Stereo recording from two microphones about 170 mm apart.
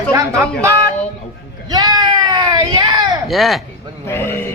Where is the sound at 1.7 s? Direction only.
25° right (ahead or behind).